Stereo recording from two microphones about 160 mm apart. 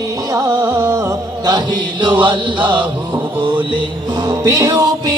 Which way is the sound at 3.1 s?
30° right (ahead or behind).